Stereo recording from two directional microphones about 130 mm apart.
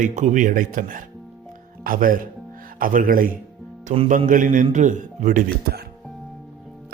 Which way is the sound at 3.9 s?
60° right (ahead or behind).